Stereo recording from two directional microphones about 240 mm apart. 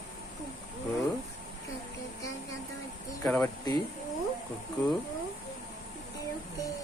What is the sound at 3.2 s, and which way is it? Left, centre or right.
Speech, centre.